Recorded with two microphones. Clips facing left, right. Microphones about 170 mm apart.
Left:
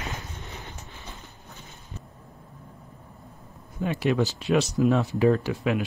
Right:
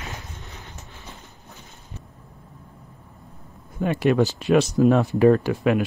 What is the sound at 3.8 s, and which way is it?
Speech, 55° right (ahead or behind).